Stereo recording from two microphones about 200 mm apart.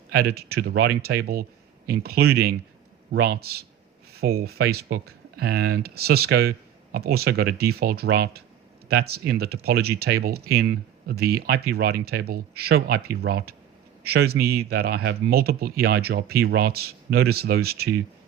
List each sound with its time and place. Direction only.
0.1 s speech: 50° right (ahead or behind)